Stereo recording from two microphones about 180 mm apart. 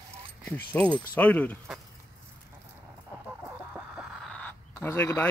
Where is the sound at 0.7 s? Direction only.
10° left (ahead or behind).